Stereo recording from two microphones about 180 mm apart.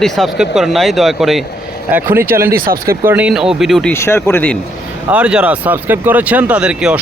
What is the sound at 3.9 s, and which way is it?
Speech, 15° left (ahead or behind).